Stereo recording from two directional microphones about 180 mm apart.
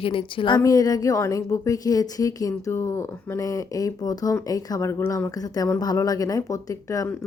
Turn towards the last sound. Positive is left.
turn(degrees=20)  # may be behind; listen again after turning